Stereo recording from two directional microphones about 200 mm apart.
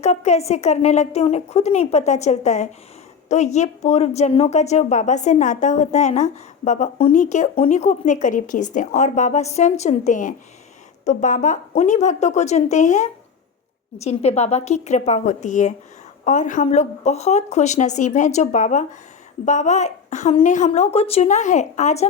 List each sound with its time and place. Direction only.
0.0 s speech: 35° left (ahead or behind)